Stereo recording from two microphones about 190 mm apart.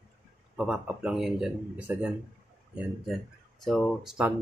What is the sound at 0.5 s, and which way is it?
Speech, 5° right (ahead or behind).